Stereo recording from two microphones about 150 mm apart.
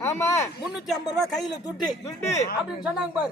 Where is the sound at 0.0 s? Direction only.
15° left (ahead or behind).